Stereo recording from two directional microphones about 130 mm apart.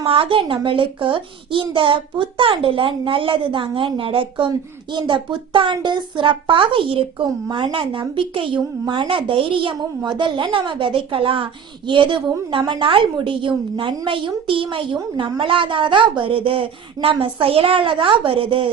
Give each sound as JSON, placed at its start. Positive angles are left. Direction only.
{"t": 0.0, "sound": "a woman's voice", "side_deg": -45}